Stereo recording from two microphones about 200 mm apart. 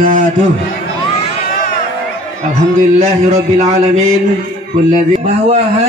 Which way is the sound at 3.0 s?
35° right (ahead or behind).